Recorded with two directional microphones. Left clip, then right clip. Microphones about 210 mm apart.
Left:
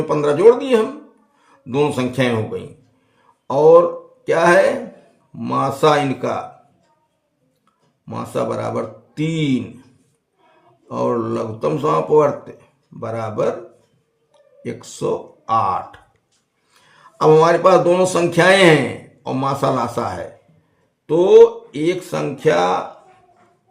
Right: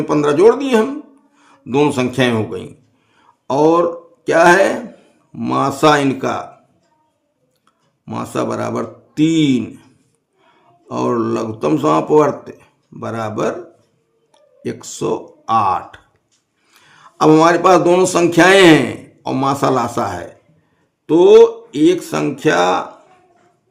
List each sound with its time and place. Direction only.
0.1 s speech: 35° right (ahead or behind)
8.0 s speech: 40° right (ahead or behind)
10.8 s speech: 35° right (ahead or behind)